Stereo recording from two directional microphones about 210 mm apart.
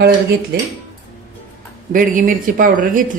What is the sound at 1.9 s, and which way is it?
A woman's voice, 40° right (ahead or behind).